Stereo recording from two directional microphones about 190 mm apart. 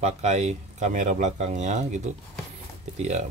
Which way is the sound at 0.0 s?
35° right (ahead or behind).